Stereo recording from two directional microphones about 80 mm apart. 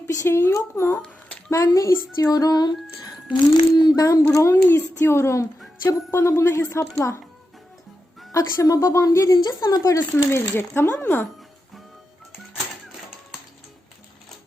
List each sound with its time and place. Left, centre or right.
0.2 s a woman's voice: left
3.2 s speech: left
4.2 s speech: left
8.3 s a woman's voice: left
9.5 s a woman's voice: left
10.4 s speech: left